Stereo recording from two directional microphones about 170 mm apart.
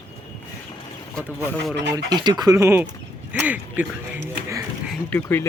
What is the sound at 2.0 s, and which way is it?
Speech, 25° right (ahead or behind).